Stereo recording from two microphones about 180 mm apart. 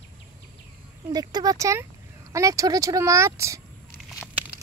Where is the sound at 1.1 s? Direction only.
20° right (ahead or behind).